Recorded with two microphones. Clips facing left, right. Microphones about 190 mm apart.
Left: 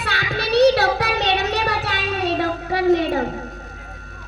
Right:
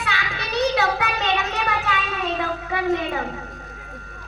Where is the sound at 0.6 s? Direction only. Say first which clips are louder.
Left 5 dB; 35° left (ahead or behind).